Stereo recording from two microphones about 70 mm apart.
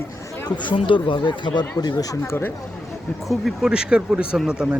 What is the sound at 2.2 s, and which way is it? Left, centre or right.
Speech, left.